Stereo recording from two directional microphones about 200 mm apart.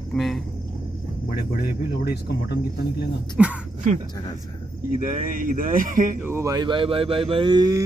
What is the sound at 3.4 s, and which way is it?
Speech, 5° right (ahead or behind).